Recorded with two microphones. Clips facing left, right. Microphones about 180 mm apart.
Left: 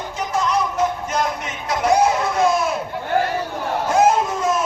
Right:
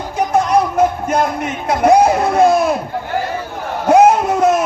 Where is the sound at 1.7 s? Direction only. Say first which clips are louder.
Right 6 dB; 55° right (ahead or behind).